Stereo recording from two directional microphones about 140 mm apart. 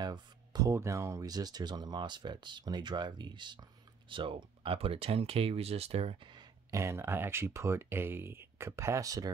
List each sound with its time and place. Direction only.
0.0 s speech: 30° right (ahead or behind)
6.7 s speech: 20° right (ahead or behind)